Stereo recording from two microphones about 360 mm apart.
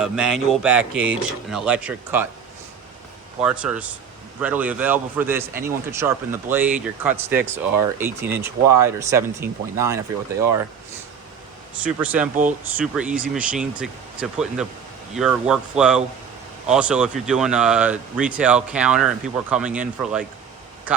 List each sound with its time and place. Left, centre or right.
0.0 s speech: centre
3.4 s speech: centre
11.7 s speech: centre
12.3 s speech: right
12.7 s speech: centre
20.9 s speech: centre